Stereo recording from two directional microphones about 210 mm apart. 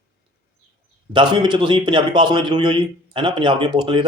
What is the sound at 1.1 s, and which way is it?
A man's voice, 20° right (ahead or behind).